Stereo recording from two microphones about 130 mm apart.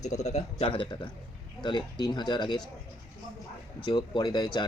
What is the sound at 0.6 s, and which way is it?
A man's voice, 40° left (ahead or behind).